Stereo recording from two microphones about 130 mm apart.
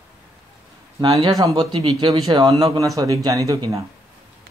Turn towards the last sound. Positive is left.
turn(degrees=-25)  # may be behind; listen again after turning